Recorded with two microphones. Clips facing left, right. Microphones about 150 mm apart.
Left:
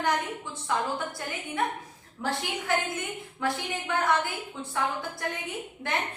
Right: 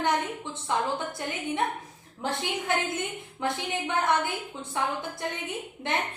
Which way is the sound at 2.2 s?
20° right (ahead or behind).